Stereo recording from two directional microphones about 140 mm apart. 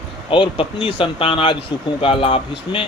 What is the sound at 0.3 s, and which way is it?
A man's voice, 40° left (ahead or behind).